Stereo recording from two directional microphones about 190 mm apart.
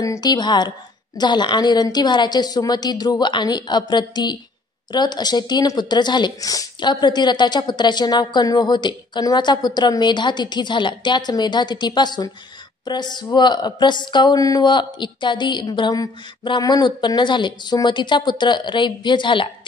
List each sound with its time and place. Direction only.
0.0 s a woman's voice: 20° left (ahead or behind)